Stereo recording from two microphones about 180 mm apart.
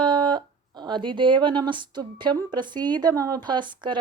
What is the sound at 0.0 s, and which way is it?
Speech, 25° right (ahead or behind).